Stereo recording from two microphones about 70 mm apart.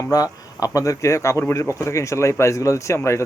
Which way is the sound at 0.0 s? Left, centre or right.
Left.